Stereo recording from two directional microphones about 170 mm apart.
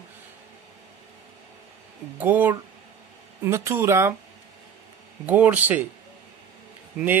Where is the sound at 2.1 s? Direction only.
10° right (ahead or behind).